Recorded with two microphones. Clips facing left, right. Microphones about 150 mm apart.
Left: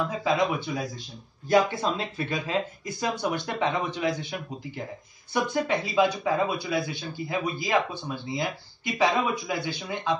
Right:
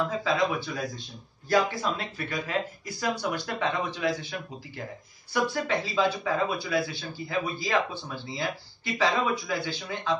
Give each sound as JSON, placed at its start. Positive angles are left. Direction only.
{"t": 0.2, "sound": "a man's voice", "side_deg": 20}